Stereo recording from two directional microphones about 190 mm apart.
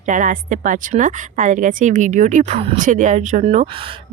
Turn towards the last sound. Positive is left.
turn(degrees=-25)  # may be behind; listen again after turning